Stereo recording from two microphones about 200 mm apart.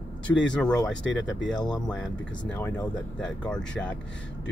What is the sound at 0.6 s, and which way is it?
Speech, 5° left (ahead or behind).